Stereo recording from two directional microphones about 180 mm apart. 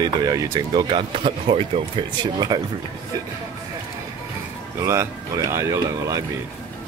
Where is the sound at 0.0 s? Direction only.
20° right (ahead or behind).